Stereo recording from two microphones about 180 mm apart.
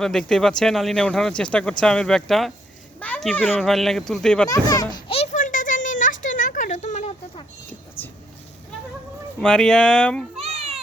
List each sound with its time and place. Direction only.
0.0 s speech: 5° left (ahead or behind)
4.4 s children playing: 20° left (ahead or behind); by 7.4 s 40° left (ahead or behind)
9.4 s speech: 5° left (ahead or behind)
10.3 s cat: 35° right (ahead or behind)